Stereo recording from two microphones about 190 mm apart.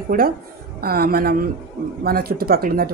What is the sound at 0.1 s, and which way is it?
Speech, 50° right (ahead or behind).